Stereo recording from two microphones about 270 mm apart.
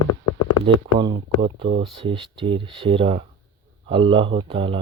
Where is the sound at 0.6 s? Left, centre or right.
Centre.